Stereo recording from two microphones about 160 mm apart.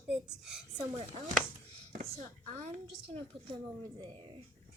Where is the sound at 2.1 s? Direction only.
55° right (ahead or behind).